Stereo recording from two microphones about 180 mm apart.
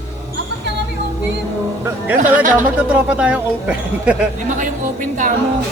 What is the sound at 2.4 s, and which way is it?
Speech, 45° right (ahead or behind).